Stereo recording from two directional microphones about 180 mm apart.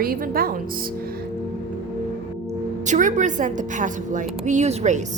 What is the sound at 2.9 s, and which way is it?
A woman's voice, 45° right (ahead or behind).